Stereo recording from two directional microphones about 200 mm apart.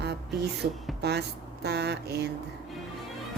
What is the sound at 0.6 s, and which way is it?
A woman's voice, 55° right (ahead or behind).